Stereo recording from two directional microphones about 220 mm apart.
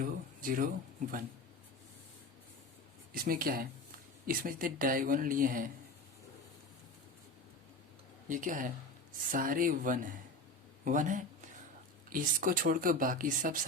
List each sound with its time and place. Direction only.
0.0 s speech: 40° right (ahead or behind)
3.1 s speech: 40° right (ahead or behind)
8.3 s speech: 35° right (ahead or behind)